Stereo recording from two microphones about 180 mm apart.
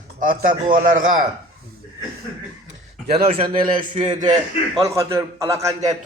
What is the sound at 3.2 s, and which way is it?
Speech, 50° right (ahead or behind).